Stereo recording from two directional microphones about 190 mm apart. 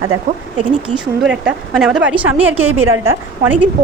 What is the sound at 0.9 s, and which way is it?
A woman's voice, 5° right (ahead or behind).